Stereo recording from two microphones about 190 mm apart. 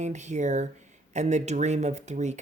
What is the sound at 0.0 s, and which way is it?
Speech, 40° right (ahead or behind).